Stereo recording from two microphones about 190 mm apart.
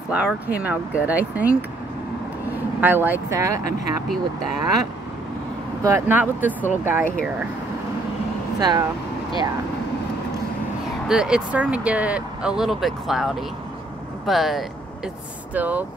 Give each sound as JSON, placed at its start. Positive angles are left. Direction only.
{"t": 0.1, "sound": "speech", "side_deg": -5}
{"t": 2.8, "sound": "speech", "side_deg": -10}
{"t": 5.9, "sound": "speech", "side_deg": -15}
{"t": 8.5, "sound": "speech", "side_deg": -20}
{"t": 11.1, "sound": "speech", "side_deg": -5}